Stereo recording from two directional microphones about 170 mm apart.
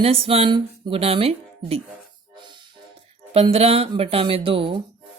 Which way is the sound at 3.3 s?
35° right (ahead or behind).